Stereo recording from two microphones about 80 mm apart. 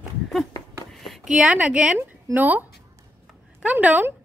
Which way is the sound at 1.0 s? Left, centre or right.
Centre.